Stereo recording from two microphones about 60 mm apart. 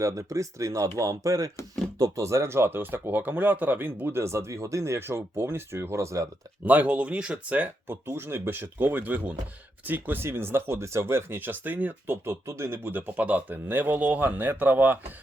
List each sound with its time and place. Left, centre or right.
0.0 s speech: right
2.2 s speech: right
4.2 s speech: right
6.7 s speech: right
7.9 s speech: right
12.1 s speech: right
13.1 s speech: right